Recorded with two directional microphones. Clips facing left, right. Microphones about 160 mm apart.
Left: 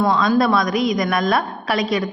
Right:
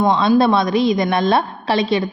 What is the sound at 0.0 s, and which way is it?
A woman's voice, 25° right (ahead or behind).